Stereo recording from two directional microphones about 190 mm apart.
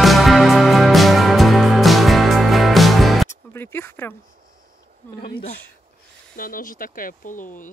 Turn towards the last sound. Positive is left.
turn(degrees=45)  # may be behind; listen again after turning